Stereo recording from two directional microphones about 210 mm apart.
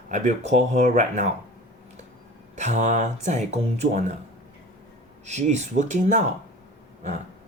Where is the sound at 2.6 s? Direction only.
35° right (ahead or behind).